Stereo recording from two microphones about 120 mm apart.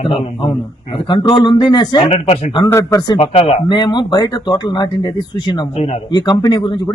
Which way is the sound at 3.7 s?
40° left (ahead or behind).